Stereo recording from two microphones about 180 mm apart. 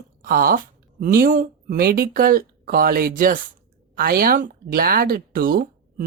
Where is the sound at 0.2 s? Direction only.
50° right (ahead or behind).